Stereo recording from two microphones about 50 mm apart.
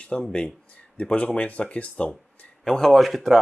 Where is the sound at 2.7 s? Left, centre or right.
Centre.